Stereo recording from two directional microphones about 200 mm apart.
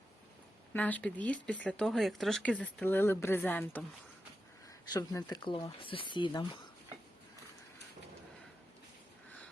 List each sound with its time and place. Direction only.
0.7 s speech: 10° left (ahead or behind)
4.9 s speech: 20° left (ahead or behind)